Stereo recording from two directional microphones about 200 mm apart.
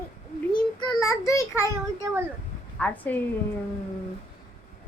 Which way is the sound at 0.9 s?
15° left (ahead or behind).